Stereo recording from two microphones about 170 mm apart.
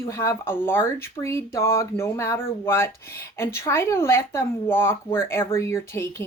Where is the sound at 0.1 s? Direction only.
15° left (ahead or behind).